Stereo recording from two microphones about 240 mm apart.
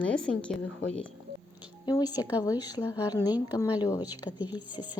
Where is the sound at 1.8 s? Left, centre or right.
Centre.